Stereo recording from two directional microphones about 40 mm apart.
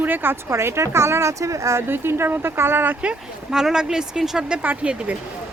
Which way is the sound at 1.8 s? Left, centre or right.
Right.